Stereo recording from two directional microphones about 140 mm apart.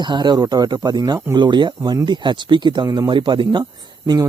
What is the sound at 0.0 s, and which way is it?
Speech, 30° right (ahead or behind).